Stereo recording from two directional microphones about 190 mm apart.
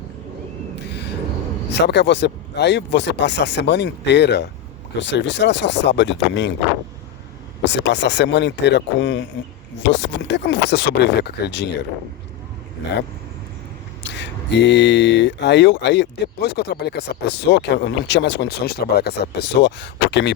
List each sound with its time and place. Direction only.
0.9 s a sound: 60° left (ahead or behind)
1.7 s speech: 65° left (ahead or behind)
7.6 s speech: 65° left (ahead or behind)
14.0 s speech: 65° left (ahead or behind)